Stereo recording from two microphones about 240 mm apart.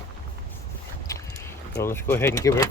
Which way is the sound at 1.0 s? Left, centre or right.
Centre.